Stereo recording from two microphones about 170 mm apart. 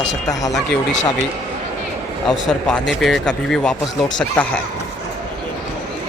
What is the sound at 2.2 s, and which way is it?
Speech, 5° left (ahead or behind).